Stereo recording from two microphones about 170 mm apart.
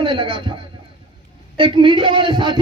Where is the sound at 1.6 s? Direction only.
30° right (ahead or behind).